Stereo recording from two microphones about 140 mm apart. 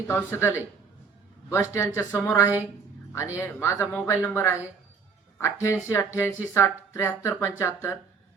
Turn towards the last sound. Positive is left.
turn(degrees=20)  # may be behind; listen again after turning